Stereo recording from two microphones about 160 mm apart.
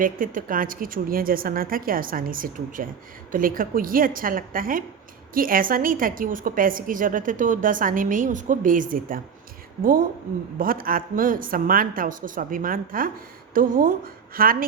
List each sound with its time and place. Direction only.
0.0 s a woman's voice: 60° right (ahead or behind)
10.6 s a woman's voice: 65° right (ahead or behind)